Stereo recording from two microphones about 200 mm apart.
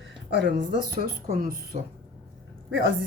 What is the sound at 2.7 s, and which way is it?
Speech, 65° right (ahead or behind).